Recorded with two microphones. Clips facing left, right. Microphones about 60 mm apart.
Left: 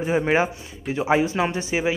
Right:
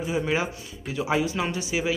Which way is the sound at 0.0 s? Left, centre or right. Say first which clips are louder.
Left 5 dB; left.